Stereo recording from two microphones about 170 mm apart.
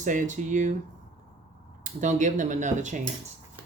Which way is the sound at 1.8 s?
45° right (ahead or behind).